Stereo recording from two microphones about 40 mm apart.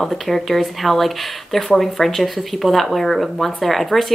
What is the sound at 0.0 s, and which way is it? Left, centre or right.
Speech, centre.